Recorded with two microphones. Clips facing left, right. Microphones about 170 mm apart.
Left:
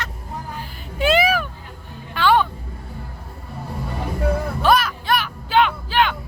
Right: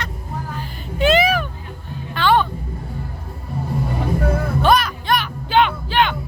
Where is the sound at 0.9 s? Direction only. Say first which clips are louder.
Right 2 dB; 10° left (ahead or behind).